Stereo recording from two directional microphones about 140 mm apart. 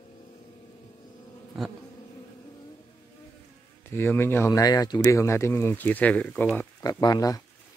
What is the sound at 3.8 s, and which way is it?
Speech, 15° left (ahead or behind).